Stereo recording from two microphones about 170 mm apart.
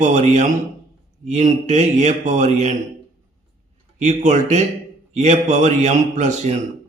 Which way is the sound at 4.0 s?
45° right (ahead or behind).